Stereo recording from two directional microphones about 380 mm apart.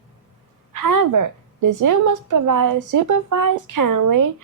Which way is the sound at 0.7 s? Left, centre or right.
Right.